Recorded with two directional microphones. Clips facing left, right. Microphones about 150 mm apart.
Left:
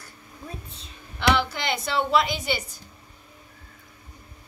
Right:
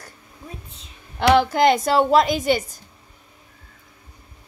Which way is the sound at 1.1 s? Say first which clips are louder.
Right 8 dB; 45° right (ahead or behind).